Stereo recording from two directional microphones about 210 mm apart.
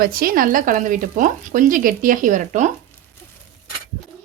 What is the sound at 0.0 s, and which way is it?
Speech, 45° right (ahead or behind).